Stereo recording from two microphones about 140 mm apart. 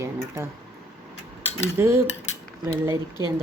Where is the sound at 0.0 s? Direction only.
20° right (ahead or behind).